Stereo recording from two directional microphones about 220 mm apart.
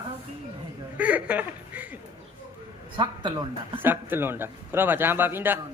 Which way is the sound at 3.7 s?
10° right (ahead or behind).